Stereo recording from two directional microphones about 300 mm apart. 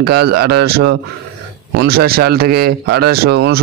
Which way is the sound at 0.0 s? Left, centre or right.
Right.